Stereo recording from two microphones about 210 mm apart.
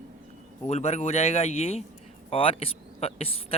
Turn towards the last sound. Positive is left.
turn(degrees=30)  # may be behind; listen again after turning